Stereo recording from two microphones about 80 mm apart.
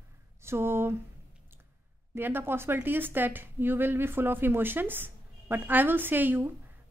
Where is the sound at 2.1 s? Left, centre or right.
Right.